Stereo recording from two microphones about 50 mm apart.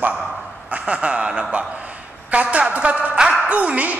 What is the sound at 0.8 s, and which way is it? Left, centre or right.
A man's voice, right.